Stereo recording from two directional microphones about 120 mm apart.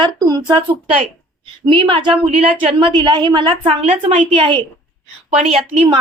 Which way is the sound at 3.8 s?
55° right (ahead or behind).